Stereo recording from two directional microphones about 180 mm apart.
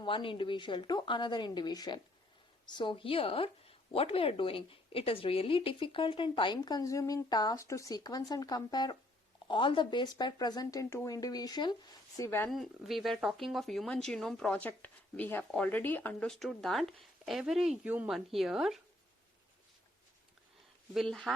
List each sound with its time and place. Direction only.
0.0 s a woman's voice: 30° left (ahead or behind)
12.5 s speech: centre (ahead or behind)
20.9 s speech: centre (ahead or behind)